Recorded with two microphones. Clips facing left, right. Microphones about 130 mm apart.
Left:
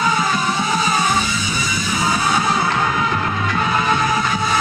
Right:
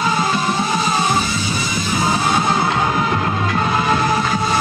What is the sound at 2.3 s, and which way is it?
Music, 25° right (ahead or behind).